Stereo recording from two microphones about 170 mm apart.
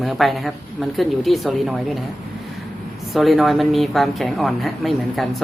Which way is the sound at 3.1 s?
Centre (ahead or behind).